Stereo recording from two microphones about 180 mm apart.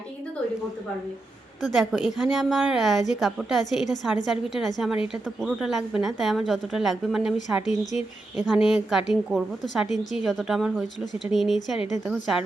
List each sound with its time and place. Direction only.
1.7 s a woman's voice: centre (ahead or behind)
7.6 s speech: 40° left (ahead or behind)
8.4 s a woman's voice: centre (ahead or behind)